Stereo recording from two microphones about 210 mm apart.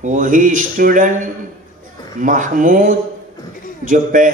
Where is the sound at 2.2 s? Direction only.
40° right (ahead or behind).